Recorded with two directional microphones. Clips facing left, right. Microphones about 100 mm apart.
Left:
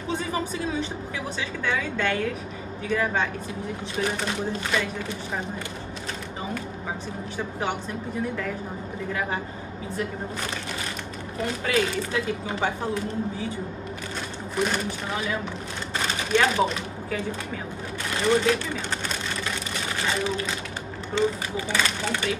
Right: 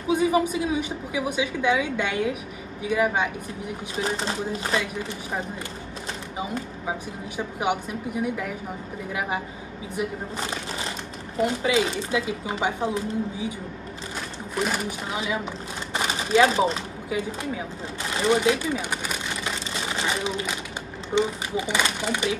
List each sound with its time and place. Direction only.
0.1 s speech: 10° right (ahead or behind)
7.3 s speech: 10° right (ahead or behind)
11.3 s speech: 20° right (ahead or behind)
14.5 s speech: 5° right (ahead or behind)
15.9 s a sound: 15° right (ahead or behind)
17.1 s speech: 10° right (ahead or behind)
18.1 s a sound: 15° right (ahead or behind)
21.1 s speech: 15° right (ahead or behind)